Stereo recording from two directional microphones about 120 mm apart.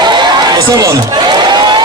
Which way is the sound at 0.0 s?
40° right (ahead or behind).